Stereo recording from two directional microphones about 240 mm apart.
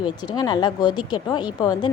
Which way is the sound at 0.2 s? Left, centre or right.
Centre.